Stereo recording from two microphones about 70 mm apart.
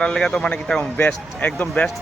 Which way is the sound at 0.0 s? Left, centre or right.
Centre.